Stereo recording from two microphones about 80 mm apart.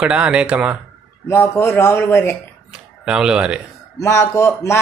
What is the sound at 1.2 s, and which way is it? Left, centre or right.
Speech, left.